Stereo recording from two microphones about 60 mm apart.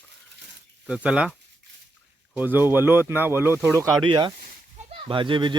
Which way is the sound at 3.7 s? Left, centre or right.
Right.